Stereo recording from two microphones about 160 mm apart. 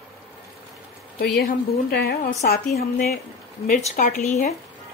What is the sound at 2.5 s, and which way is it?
Speech, 75° left (ahead or behind).